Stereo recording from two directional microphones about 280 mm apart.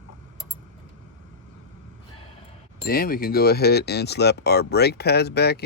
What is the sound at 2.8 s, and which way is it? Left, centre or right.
Speech, left.